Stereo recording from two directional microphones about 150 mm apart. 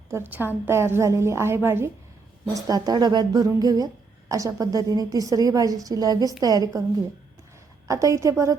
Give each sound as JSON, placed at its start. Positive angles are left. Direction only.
{"t": 0.1, "sound": "a woman's voice", "side_deg": -15}
{"t": 7.9, "sound": "a woman's voice", "side_deg": -20}